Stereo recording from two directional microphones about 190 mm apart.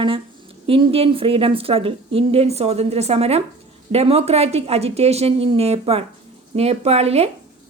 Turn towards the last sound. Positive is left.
turn(degrees=-35)  # may be behind; listen again after turning